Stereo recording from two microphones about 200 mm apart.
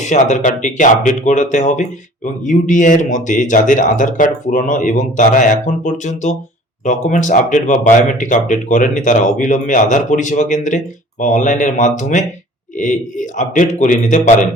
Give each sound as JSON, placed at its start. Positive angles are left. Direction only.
{"t": 0.0, "sound": "speech", "side_deg": 40}